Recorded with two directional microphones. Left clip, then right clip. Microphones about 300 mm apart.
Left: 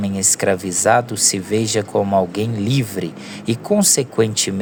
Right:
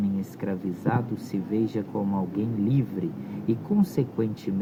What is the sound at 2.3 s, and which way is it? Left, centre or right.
Speech, left.